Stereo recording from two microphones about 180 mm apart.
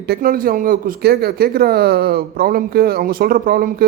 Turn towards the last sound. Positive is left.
turn(degrees=-55)  # may be behind; listen again after turning